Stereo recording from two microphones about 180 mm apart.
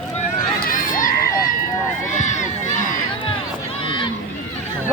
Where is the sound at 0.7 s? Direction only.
50° left (ahead or behind).